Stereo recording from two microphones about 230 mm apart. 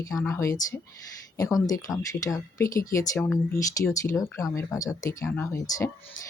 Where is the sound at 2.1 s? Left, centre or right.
Centre.